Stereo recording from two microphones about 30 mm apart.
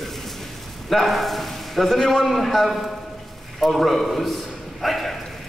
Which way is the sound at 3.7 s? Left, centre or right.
Centre.